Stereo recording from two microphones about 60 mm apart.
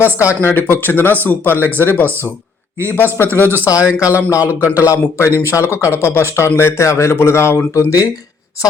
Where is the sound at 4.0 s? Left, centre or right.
Left.